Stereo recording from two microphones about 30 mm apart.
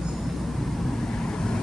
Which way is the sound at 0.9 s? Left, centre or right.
Left.